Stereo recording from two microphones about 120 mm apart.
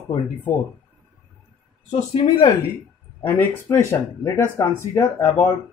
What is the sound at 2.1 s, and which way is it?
Speech, 50° left (ahead or behind).